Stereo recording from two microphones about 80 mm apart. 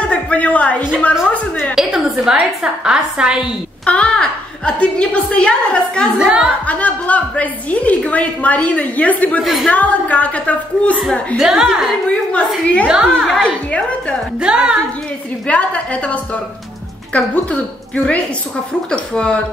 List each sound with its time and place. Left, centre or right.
0.0 s a sound: centre
1.3 s speech: centre
1.8 s a woman's voice: centre
3.8 s a woman's voice: centre
6.1 s a woman's voice: centre
6.6 s a woman's voice: centre
9.4 s a woman's voice: centre
9.7 s a woman's voice: centre
11.3 s a woman's voice: centre
12.1 s a woman's voice: centre
12.8 s a woman's voice: centre
13.3 s a woman's voice: centre
14.4 s a woman's voice: centre
15.4 s a woman's voice: centre